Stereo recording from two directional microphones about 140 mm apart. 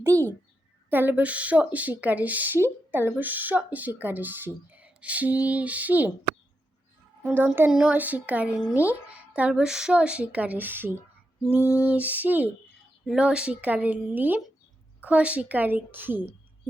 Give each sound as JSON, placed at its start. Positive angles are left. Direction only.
{"t": 0.0, "sound": "a sound", "side_deg": -20}
{"t": 0.9, "sound": "speech", "side_deg": -15}
{"t": 7.2, "sound": "speech", "side_deg": -15}
{"t": 11.6, "sound": "lullaby", "side_deg": 20}
{"t": 11.9, "sound": "speech", "side_deg": -10}